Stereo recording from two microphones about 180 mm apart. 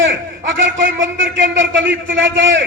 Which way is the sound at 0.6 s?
90° right.